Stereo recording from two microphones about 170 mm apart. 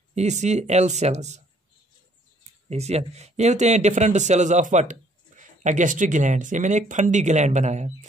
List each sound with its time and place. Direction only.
0.1 s speech: 40° right (ahead or behind)
2.7 s speech: 40° right (ahead or behind)